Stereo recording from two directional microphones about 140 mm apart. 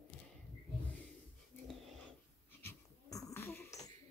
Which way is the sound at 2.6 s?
25° left (ahead or behind).